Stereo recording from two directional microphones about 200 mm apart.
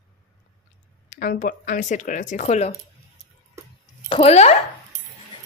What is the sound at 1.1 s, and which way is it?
Speech, 40° left (ahead or behind).